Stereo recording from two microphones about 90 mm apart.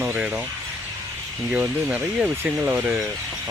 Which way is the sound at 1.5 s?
15° right (ahead or behind).